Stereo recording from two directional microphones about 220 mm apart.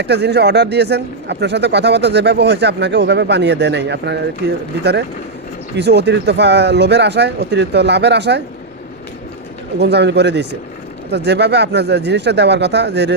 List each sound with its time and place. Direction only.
0.0 s speech: 50° right (ahead or behind)
9.7 s speech: 50° right (ahead or behind)